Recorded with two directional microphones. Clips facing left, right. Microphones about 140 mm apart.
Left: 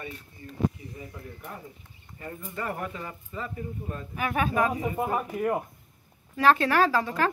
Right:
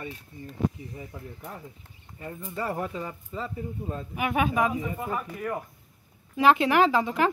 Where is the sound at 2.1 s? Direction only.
15° right (ahead or behind).